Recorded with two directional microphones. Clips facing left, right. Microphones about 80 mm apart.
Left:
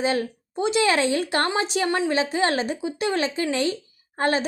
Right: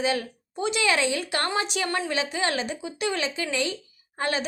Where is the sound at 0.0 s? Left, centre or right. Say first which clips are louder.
Left 3 dB; left.